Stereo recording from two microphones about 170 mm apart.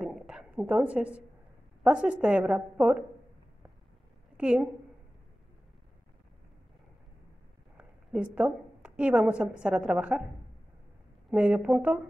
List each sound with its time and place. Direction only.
0.0 s a sound: 5° right (ahead or behind)
1.8 s a woman's voice: 5° right (ahead or behind)
4.4 s a woman's voice: 5° right (ahead or behind)
7.7 s a woman's voice: 5° right (ahead or behind)
11.2 s speech: 5° right (ahead or behind)